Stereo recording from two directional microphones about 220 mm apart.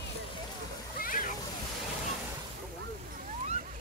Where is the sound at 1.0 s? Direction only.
40° left (ahead or behind).